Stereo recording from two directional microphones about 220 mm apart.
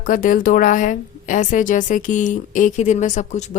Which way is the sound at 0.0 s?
40° left (ahead or behind).